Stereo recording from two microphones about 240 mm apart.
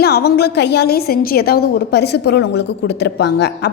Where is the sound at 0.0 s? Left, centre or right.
Left.